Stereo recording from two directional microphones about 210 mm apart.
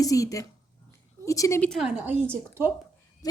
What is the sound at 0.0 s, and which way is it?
A woman's voice, 15° left (ahead or behind).